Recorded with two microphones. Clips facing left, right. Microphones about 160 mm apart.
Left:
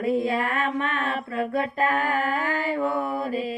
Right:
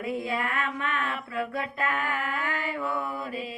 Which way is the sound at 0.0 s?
30° left (ahead or behind).